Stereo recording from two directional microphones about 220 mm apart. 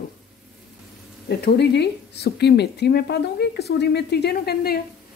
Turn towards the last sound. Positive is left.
turn(degrees=45)  # may be behind; listen again after turning